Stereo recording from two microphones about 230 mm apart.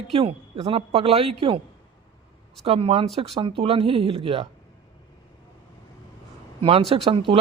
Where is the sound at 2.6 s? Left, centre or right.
Right.